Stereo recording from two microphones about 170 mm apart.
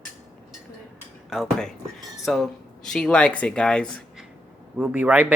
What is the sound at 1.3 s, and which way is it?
Speech, centre (ahead or behind).